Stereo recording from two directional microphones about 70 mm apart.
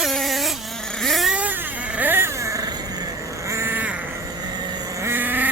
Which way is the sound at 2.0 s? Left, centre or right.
Right.